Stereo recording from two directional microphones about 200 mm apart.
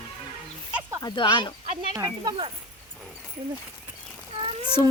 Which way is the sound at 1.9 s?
20° right (ahead or behind).